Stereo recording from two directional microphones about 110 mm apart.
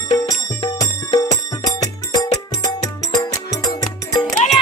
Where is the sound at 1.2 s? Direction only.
35° left (ahead or behind).